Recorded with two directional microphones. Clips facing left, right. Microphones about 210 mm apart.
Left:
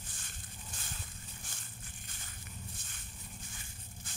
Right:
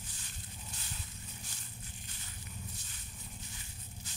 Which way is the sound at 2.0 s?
50° left (ahead or behind).